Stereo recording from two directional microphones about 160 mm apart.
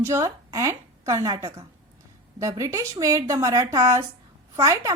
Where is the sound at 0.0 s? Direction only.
20° right (ahead or behind).